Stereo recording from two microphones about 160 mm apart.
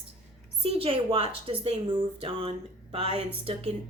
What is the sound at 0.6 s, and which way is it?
A woman's voice, 40° right (ahead or behind).